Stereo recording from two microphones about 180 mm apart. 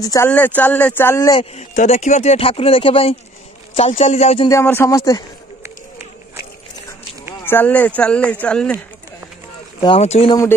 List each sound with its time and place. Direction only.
0.0 s speech: 20° left (ahead or behind)
1.3 s speech: 35° left (ahead or behind)
4.5 s speech: 15° left (ahead or behind)
7.4 s speech: 10° left (ahead or behind)
9.8 s speech: 30° left (ahead or behind)